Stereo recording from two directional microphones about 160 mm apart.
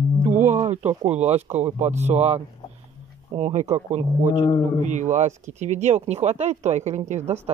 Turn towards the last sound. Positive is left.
turn(degrees=-45)  # may be behind; listen again after turning